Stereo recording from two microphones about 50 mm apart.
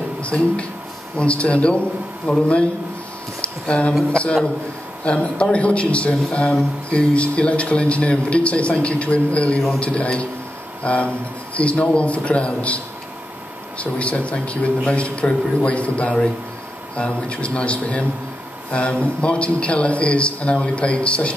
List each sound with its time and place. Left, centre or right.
0.2 s a man's voice: left
3.3 s a sound: left
4.1 s a man's voice: left